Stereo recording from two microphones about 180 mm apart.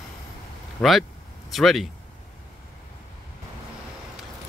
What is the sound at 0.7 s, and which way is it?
Speech, centre (ahead or behind).